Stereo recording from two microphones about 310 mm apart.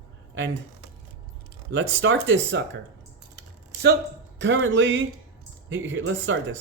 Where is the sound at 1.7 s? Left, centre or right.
Right.